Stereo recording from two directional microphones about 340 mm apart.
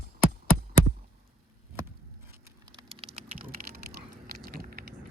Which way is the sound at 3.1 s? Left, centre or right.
Right.